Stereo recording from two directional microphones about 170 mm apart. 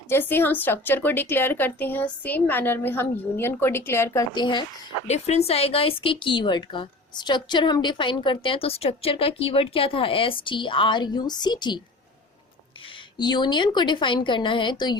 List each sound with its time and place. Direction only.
0.1 s a woman's voice: 10° left (ahead or behind)
5.0 s speech: 40° left (ahead or behind)
13.1 s speech: 25° left (ahead or behind)